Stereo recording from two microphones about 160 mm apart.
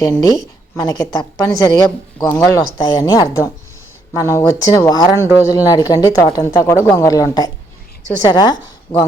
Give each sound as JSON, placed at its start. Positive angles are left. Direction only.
{"t": 0.0, "sound": "speech", "side_deg": 20}